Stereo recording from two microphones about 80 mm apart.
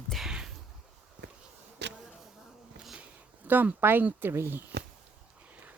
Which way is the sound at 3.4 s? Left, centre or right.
Right.